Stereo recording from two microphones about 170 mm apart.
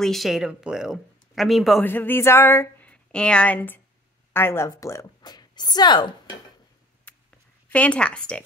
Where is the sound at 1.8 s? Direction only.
10° left (ahead or behind).